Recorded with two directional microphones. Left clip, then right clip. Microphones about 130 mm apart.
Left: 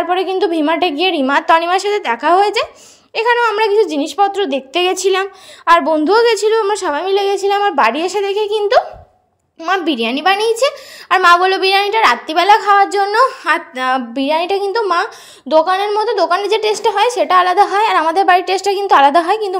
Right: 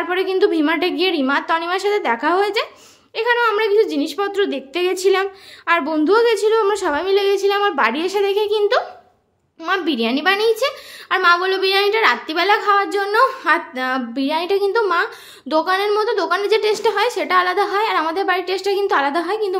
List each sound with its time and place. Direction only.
0.0 s a woman's voice: 30° left (ahead or behind)
1.3 s a woman's voice: 50° left (ahead or behind)
5.7 s a woman's voice: 35° left (ahead or behind)
6.6 s a woman's voice: 35° left (ahead or behind)
11.2 s a woman's voice: 65° left (ahead or behind); by 13.5 s 40° left (ahead or behind)
13.5 s a woman's voice: 55° left (ahead or behind)